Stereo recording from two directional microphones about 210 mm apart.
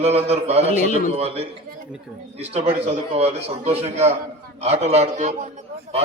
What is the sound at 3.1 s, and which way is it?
A man's voice, 30° right (ahead or behind).